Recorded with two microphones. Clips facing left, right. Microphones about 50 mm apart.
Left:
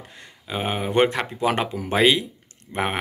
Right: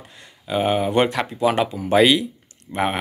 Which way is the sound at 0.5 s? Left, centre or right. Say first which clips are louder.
Right 6 dB; centre.